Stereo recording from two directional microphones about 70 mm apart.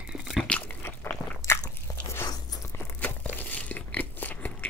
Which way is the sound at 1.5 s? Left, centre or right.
Left.